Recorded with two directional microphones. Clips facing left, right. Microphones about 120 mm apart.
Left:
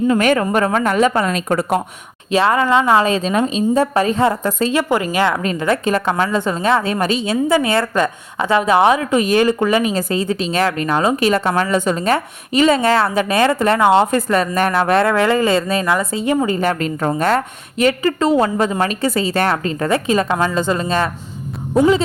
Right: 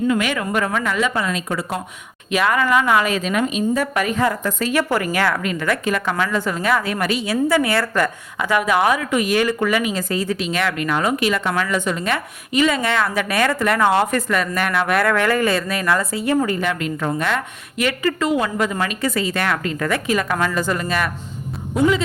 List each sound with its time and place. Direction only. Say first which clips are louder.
0.1 s a woman's voice: left 5 dB; 40° left (ahead or behind)
2.3 s a woman's voice: left 3 dB; 30° left (ahead or behind)
5.4 s a woman's voice: left 4 dB; 30° left (ahead or behind)
16.6 s a woman's voice: left 4 dB; 40° left (ahead or behind)